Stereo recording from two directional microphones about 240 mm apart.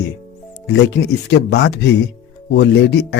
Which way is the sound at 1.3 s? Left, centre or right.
Left.